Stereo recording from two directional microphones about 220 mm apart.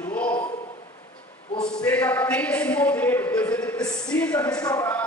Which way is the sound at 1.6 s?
5° left (ahead or behind).